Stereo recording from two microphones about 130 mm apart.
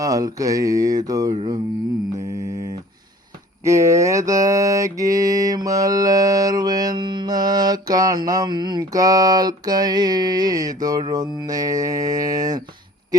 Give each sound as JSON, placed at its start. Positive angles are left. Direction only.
{"t": 0.0, "sound": "mantra", "side_deg": -30}